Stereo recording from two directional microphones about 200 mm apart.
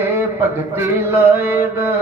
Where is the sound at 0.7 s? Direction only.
10° right (ahead or behind).